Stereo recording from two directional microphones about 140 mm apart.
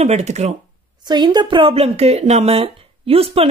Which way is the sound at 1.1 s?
30° right (ahead or behind).